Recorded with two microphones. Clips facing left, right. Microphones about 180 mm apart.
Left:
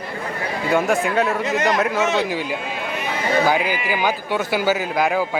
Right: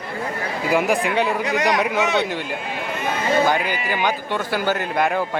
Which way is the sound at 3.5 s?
5° left (ahead or behind).